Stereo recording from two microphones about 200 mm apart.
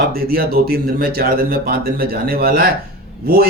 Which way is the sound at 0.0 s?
50° right (ahead or behind).